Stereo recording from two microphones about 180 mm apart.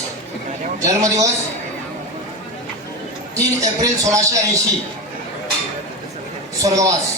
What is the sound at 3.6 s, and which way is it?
A man's voice, 20° right (ahead or behind).